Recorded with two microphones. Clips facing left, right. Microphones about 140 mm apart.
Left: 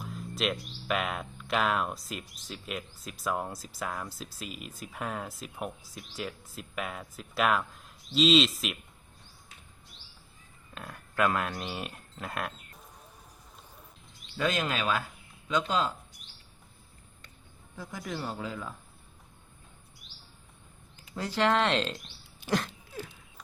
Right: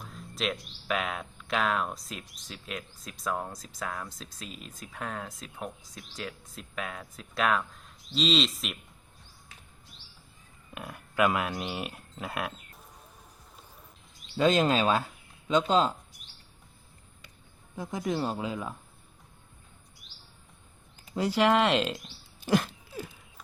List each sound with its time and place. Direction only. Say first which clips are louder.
0.0 s speech: left 1 dB; centre (ahead or behind)
10.8 s speech: right 2 dB; 10° right (ahead or behind)
14.3 s speech: right 6 dB; 30° right (ahead or behind)
17.7 s speech: right 7 dB; 20° right (ahead or behind)
21.2 s speech: right 3 dB; 10° right (ahead or behind)
22.4 s a sound: right 4 dB; 5° right (ahead or behind)